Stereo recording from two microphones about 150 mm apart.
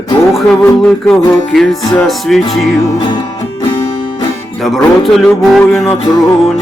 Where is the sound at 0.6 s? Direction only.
10° left (ahead or behind).